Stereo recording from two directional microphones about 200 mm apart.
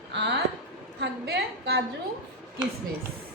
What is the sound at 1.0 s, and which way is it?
Speech, 55° right (ahead or behind).